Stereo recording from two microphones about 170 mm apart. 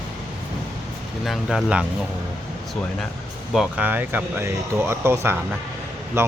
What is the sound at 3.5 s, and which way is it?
Speech, 5° right (ahead or behind).